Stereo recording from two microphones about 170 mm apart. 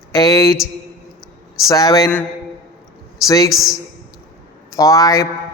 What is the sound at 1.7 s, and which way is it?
Speech, 20° left (ahead or behind).